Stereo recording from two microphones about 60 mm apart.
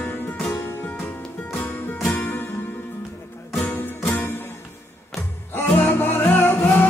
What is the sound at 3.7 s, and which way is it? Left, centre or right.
Music, left.